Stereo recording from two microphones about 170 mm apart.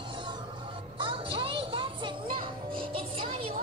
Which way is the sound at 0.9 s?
30° right (ahead or behind).